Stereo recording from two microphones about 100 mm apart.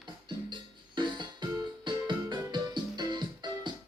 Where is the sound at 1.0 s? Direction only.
50° right (ahead or behind).